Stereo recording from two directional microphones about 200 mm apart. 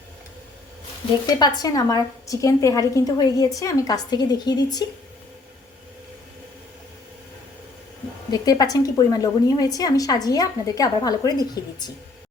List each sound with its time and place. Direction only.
1.3 s a woman's voice: 20° left (ahead or behind)
8.3 s a woman's voice: 20° left (ahead or behind)